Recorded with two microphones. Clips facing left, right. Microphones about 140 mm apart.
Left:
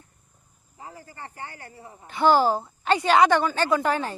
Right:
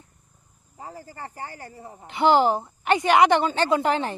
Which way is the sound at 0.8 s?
35° right (ahead or behind).